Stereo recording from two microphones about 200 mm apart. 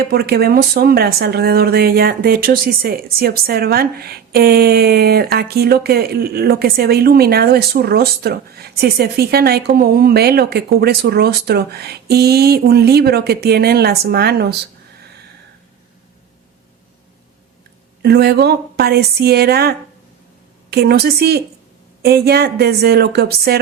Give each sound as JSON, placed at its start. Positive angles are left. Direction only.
{"t": 0.0, "sound": "speech", "side_deg": -50}
{"t": 18.0, "sound": "speech", "side_deg": -55}